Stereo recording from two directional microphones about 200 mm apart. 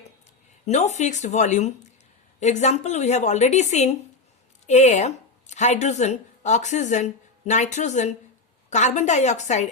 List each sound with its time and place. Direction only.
0.6 s speech: 35° left (ahead or behind)